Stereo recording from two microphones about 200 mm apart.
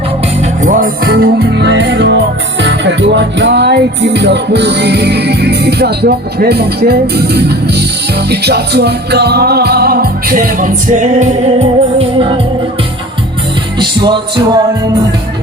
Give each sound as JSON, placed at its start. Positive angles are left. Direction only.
{"t": 0.6, "sound": "music", "side_deg": -40}
{"t": 11.2, "sound": "music", "side_deg": -30}
{"t": 13.7, "sound": "music", "side_deg": -25}